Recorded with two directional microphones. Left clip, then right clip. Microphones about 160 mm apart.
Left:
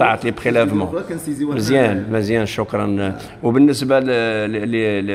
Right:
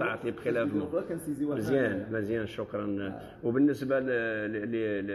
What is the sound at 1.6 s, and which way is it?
A man's voice, 45° left (ahead or behind).